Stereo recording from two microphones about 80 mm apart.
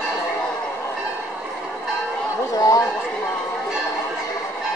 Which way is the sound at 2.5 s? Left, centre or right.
Left.